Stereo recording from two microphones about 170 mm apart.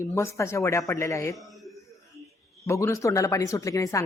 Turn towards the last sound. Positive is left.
turn(degrees=20)  # may be behind; listen again after turning